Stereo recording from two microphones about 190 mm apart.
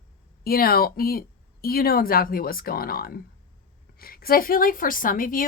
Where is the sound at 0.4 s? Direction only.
50° left (ahead or behind).